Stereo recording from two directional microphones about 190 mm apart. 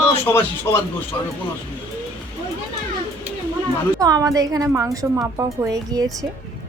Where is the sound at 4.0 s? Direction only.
20° right (ahead or behind).